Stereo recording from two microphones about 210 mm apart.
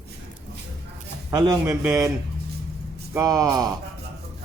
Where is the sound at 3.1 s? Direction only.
15° right (ahead or behind).